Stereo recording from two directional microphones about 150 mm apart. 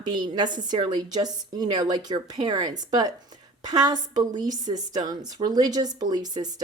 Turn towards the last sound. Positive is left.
turn(degrees=-25)  # may be behind; listen again after turning